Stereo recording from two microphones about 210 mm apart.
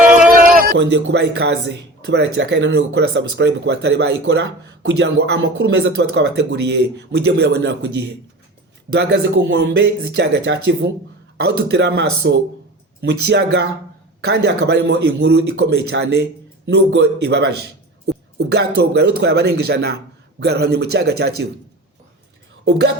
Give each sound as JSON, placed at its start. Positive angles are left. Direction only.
{"t": 0.3, "sound": "music", "side_deg": -40}
{"t": 2.0, "sound": "speech", "side_deg": -55}